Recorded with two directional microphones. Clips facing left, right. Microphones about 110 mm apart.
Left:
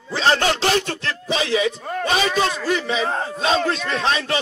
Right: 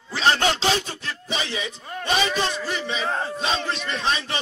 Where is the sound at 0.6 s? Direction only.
60° left (ahead or behind); by 2.0 s 90° left.